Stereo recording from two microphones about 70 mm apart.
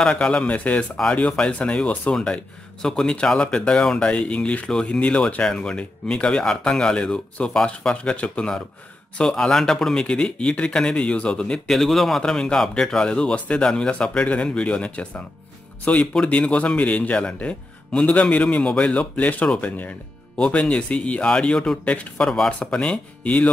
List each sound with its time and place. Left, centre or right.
0.0 s speech: centre
22.5 s speech: centre